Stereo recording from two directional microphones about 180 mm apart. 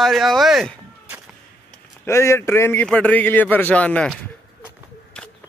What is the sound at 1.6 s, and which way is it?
Speech, 15° left (ahead or behind).